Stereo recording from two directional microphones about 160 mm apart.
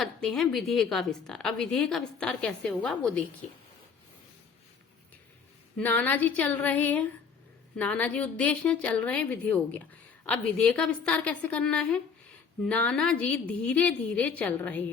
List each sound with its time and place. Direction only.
0.0 s a woman's voice: 5° left (ahead or behind)
5.7 s a woman's voice: 10° left (ahead or behind)